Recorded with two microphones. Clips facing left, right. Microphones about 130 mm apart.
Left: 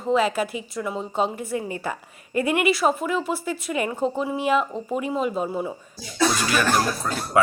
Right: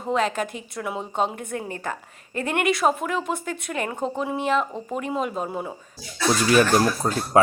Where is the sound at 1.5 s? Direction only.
50° right (ahead or behind).